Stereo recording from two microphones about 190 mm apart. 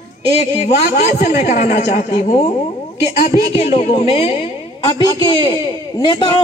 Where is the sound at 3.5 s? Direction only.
35° left (ahead or behind).